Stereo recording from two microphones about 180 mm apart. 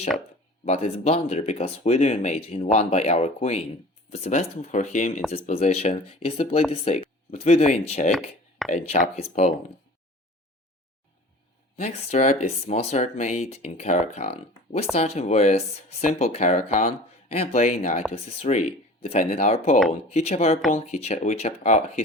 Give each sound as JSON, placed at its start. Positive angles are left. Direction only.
{"t": 0.6, "sound": "speech", "side_deg": 35}
{"t": 11.8, "sound": "speech", "side_deg": 35}